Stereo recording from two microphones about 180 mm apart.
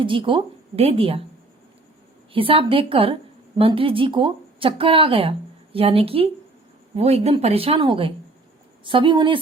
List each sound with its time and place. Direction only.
0.0 s speech: 30° right (ahead or behind)
2.3 s speech: 30° right (ahead or behind)